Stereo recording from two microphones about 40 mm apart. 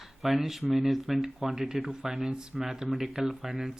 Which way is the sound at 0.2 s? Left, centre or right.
Centre.